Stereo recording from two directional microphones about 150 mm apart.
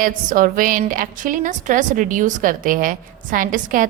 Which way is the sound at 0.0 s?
65° right (ahead or behind).